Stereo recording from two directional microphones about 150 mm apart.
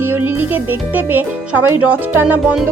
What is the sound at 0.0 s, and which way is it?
Speech, 15° right (ahead or behind).